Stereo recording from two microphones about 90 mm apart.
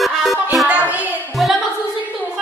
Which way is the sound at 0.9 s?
20° right (ahead or behind).